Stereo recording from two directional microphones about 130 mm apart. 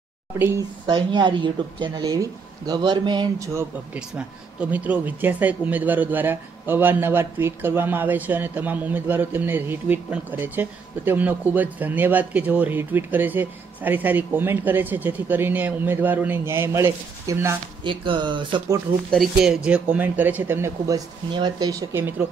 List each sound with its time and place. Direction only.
0.4 s speech: 20° right (ahead or behind)
0.8 s speech: 35° right (ahead or behind)
4.1 s speech: 10° right (ahead or behind)
17.8 s speech: 40° right (ahead or behind)
19.0 s speech: centre (ahead or behind); by 21.0 s 25° right (ahead or behind)
21.3 s speech: 35° right (ahead or behind)